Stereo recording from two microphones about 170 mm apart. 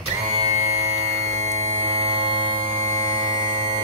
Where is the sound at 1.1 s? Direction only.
40° right (ahead or behind).